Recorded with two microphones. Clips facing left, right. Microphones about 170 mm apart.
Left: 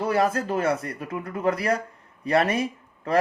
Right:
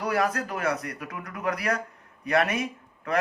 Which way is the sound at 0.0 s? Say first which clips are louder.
Left 3 dB; 25° left (ahead or behind).